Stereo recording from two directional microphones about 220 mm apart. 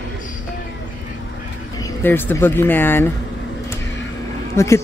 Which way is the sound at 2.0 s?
10° left (ahead or behind).